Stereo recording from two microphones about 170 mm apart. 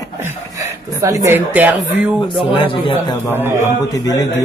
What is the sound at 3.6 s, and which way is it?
Speech, 20° left (ahead or behind).